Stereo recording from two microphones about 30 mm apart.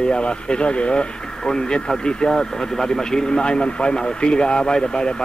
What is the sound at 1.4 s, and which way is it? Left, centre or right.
Speech, left.